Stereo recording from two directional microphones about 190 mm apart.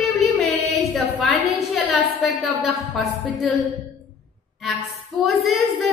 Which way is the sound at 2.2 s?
Centre (ahead or behind).